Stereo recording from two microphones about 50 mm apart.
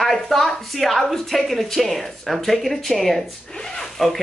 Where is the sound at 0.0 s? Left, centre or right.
Centre.